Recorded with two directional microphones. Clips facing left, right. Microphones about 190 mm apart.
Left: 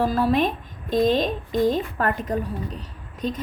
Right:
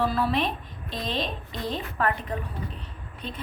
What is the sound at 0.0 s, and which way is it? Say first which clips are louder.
A woman's voice: left 5 dB; 45° left (ahead or behind).